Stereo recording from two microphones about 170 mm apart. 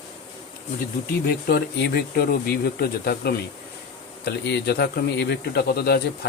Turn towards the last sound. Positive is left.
turn(degrees=70)  # may be behind; listen again after turning